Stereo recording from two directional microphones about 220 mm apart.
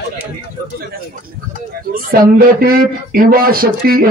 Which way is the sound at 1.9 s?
40° right (ahead or behind).